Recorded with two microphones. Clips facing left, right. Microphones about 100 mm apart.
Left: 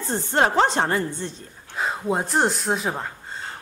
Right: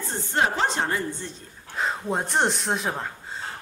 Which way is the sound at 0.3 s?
55° left (ahead or behind).